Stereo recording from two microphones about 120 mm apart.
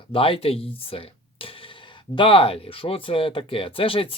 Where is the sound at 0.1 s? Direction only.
50° left (ahead or behind).